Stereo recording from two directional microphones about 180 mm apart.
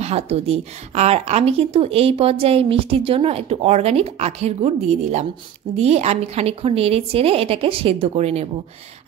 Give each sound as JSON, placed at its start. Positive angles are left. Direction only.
{"t": 0.0, "sound": "a woman's voice", "side_deg": -35}